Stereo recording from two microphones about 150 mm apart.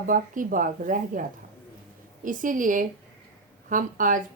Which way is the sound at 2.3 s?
60° right (ahead or behind).